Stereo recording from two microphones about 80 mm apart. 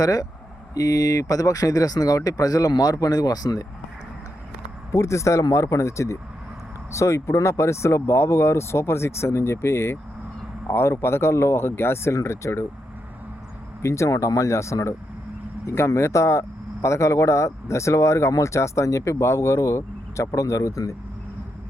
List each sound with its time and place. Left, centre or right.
0.0 s speech: left
4.9 s speech: left
13.8 s speech: left